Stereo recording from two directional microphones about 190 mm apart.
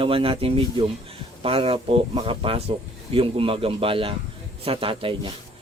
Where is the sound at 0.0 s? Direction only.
30° right (ahead or behind).